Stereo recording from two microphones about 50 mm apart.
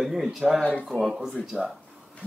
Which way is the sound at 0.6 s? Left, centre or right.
Left.